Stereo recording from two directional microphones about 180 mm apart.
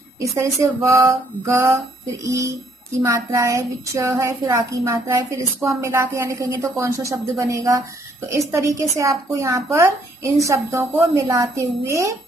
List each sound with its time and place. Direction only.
0.2 s a woman's voice: 15° right (ahead or behind)